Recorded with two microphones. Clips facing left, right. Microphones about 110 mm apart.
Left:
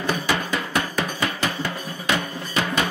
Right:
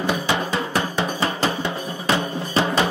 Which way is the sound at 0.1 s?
25° right (ahead or behind).